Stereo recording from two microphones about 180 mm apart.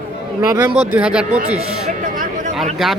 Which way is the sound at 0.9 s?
5° right (ahead or behind).